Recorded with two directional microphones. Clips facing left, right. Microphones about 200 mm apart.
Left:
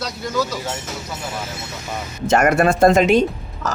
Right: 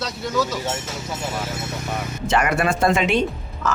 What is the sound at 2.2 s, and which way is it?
Speech, 45° left (ahead or behind).